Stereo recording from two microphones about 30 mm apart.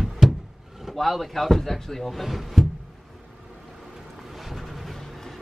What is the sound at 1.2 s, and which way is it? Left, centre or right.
Speech, centre.